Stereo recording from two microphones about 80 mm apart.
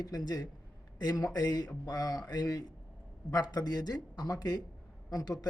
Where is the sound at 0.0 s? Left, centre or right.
Left.